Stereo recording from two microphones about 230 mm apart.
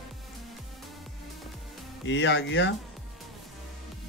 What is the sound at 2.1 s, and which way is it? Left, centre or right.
Speech, left.